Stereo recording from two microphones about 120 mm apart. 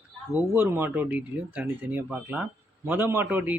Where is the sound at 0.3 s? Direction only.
15° right (ahead or behind).